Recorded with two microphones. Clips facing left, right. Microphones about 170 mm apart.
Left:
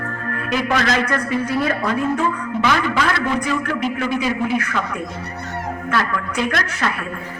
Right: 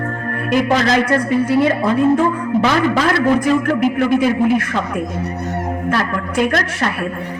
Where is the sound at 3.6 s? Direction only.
50° right (ahead or behind).